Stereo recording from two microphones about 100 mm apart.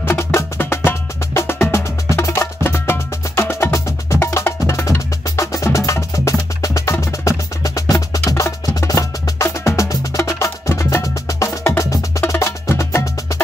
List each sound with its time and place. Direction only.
0.0 s music: 25° left (ahead or behind)
8.3 s wood block: 35° left (ahead or behind)